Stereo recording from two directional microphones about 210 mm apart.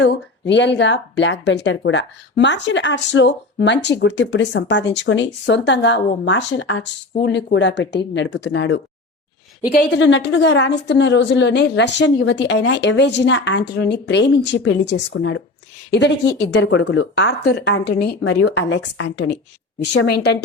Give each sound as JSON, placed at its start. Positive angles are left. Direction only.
{"t": 0.0, "sound": "speech", "side_deg": 60}
{"t": 20.1, "sound": "a woman's voice", "side_deg": 55}